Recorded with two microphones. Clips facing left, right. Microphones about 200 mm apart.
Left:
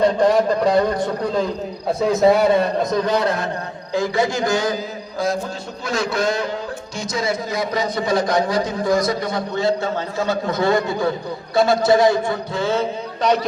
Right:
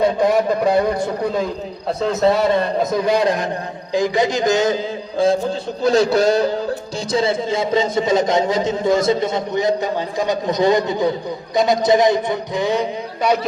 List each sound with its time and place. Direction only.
0.0 s a man's voice: 10° right (ahead or behind)
2.0 s a man's voice: 10° left (ahead or behind)
2.8 s a man's voice: 10° right (ahead or behind)